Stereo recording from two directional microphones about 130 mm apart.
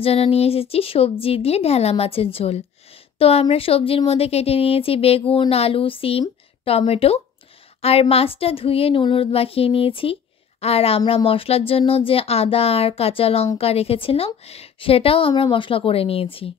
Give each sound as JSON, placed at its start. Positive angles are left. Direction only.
{"t": 0.0, "sound": "a woman's voice", "side_deg": 50}